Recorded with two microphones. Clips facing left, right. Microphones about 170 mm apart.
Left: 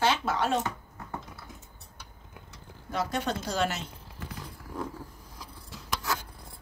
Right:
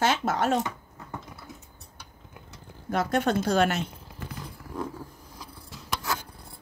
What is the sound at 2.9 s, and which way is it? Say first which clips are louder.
Speech: right 6 dB; 55° right (ahead or behind).